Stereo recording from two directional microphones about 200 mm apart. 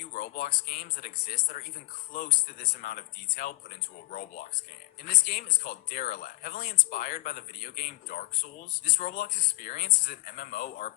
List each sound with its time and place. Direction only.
0.1 s speech: 45° left (ahead or behind)